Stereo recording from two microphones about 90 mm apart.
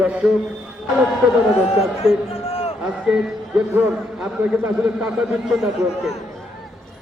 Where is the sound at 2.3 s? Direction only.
90° left.